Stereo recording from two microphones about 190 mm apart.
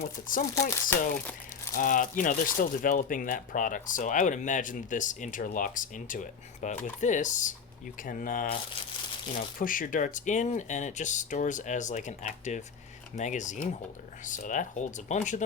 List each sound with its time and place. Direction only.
0.0 s speech: 45° left (ahead or behind)
0.9 s speech: 10° left (ahead or behind)
1.7 s speech: 45° left (ahead or behind)
9.6 s speech: 45° left (ahead or behind)